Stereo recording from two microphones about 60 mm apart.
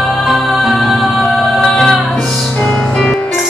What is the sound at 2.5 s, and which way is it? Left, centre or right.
Music, left.